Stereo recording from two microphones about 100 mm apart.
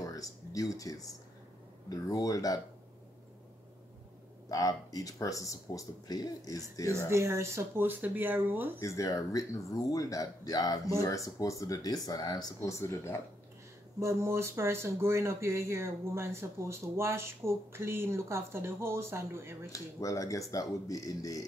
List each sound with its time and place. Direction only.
0.0 s speech: 35° left (ahead or behind)
4.5 s speech: 35° left (ahead or behind)
7.1 s speech: 25° right (ahead or behind)
8.8 s speech: 30° left (ahead or behind)
12.6 s speech: 30° left (ahead or behind)
13.9 s speech: 25° right (ahead or behind)
19.7 s speech: 35° left (ahead or behind)